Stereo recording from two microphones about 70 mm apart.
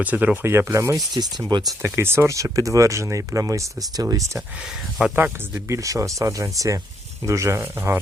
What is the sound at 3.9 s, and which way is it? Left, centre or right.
Speech, right.